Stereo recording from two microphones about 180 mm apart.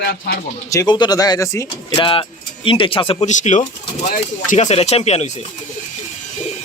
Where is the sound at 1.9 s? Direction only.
30° left (ahead or behind).